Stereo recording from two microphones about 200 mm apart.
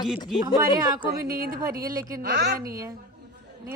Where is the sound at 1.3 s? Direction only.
45° right (ahead or behind).